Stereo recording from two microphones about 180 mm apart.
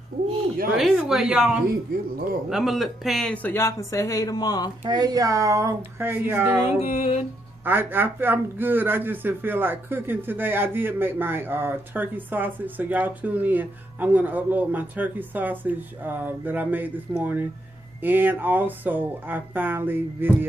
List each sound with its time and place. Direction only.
0.7 s speech: centre (ahead or behind); by 4.6 s 20° left (ahead or behind)
4.8 s a man's voice: 20° right (ahead or behind)
6.9 s music: 35° left (ahead or behind)
7.6 s a man's voice: 10° right (ahead or behind)